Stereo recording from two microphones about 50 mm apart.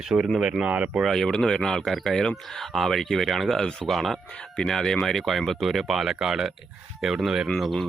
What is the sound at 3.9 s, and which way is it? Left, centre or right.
Speech, centre.